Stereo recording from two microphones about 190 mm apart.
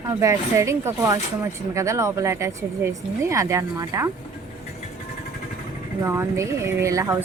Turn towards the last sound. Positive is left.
turn(degrees=-15)  # may be behind; listen again after turning